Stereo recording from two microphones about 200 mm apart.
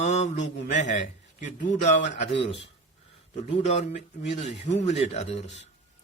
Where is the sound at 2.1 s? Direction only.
60° left (ahead or behind).